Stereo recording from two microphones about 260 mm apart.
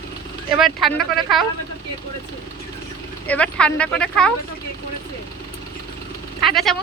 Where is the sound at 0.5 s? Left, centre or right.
Centre.